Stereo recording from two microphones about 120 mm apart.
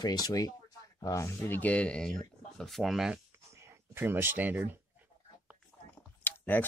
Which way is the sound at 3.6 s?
20° right (ahead or behind).